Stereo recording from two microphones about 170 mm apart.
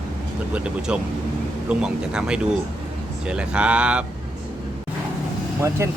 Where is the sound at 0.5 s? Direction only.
5° right (ahead or behind).